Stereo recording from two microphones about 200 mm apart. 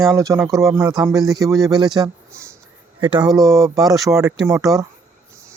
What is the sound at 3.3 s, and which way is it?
Speech, 15° right (ahead or behind).